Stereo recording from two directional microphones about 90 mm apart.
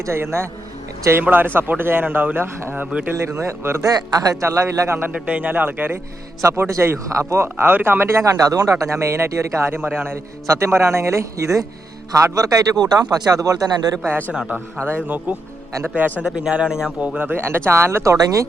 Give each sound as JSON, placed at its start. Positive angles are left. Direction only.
{"t": 0.0, "sound": "a man's voice", "side_deg": -30}
{"t": 3.2, "sound": "speech", "side_deg": -30}
{"t": 3.8, "sound": "speech", "side_deg": -45}
{"t": 5.1, "sound": "a man's voice", "side_deg": -15}
{"t": 7.5, "sound": "a man's voice", "side_deg": -20}
{"t": 8.2, "sound": "speech", "side_deg": -40}
{"t": 14.3, "sound": "a man's voice", "side_deg": -20}
{"t": 17.2, "sound": "a man's voice", "side_deg": -20}